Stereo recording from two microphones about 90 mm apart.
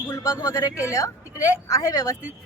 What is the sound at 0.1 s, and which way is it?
A woman's voice, 40° left (ahead or behind).